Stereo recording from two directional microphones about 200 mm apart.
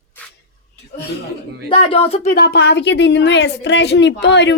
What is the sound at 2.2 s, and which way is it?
Speech, 50° left (ahead or behind).